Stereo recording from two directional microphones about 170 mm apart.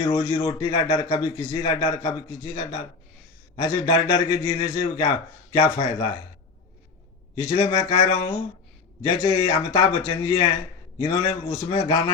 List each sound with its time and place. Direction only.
0.0 s a man's voice: 25° left (ahead or behind)
7.3 s a man's voice: 25° left (ahead or behind)